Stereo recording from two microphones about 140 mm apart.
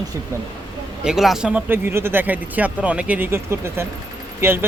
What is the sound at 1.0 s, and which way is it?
Speech, centre (ahead or behind).